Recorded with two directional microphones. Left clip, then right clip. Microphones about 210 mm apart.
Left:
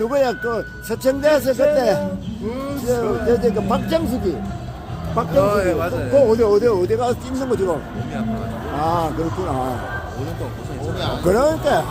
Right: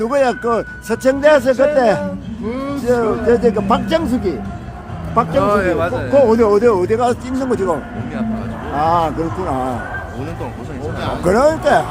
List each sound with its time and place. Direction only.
0.0 s speech: 10° right (ahead or behind)
0.4 s speech: 25° right (ahead or behind)
5.4 s speech: 40° right (ahead or behind); by 7.8 s 15° right (ahead or behind)
8.8 s speech: 15° right (ahead or behind)
11.3 s speech: 20° right (ahead or behind)